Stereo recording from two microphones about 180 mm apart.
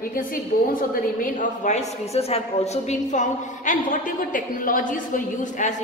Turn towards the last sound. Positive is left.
turn(degrees=45)  # may be behind; listen again after turning